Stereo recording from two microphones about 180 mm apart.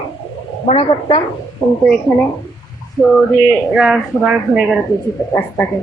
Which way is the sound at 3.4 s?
5° right (ahead or behind).